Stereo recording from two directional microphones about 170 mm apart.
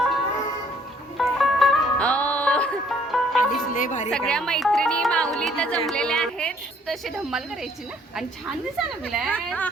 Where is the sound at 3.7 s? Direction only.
50° left (ahead or behind).